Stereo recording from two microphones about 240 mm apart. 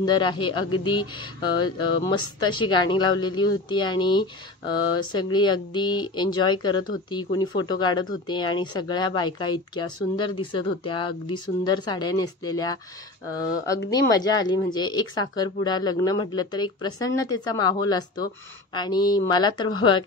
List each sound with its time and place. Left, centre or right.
0.0 s speech: centre
0.7 s speech: left
0.9 s speech: centre
13.8 s speech: centre